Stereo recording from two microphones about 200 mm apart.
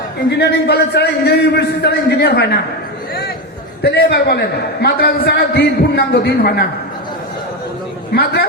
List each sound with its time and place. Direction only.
0.3 s a man's voice: 55° left (ahead or behind)
3.8 s a man's voice: 55° left (ahead or behind)
8.1 s a man's voice: 50° left (ahead or behind)